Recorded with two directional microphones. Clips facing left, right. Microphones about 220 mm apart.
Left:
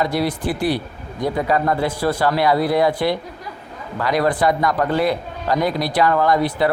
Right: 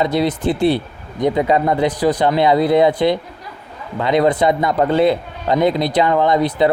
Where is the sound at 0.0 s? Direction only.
20° right (ahead or behind).